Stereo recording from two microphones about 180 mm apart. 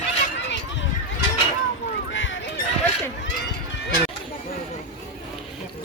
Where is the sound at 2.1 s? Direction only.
90° left.